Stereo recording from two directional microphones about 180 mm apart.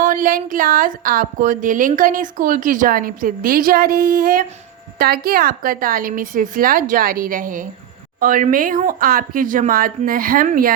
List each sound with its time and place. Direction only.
0.0 s speech: 50° right (ahead or behind)